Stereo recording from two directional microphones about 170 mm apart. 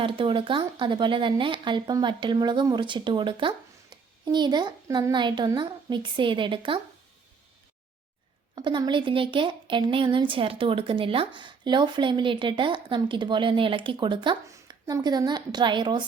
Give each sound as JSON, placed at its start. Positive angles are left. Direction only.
{"t": 0.0, "sound": "speech", "side_deg": -30}
{"t": 8.5, "sound": "a woman's voice", "side_deg": -25}